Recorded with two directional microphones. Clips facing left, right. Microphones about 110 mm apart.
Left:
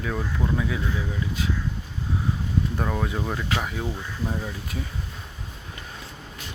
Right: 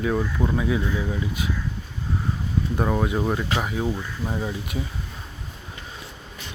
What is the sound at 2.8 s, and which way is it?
Speech, 15° right (ahead or behind).